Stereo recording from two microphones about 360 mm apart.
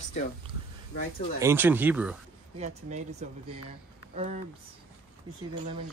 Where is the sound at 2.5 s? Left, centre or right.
Centre.